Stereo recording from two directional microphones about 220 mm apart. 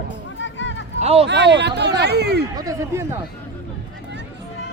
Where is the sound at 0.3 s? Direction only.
55° left (ahead or behind).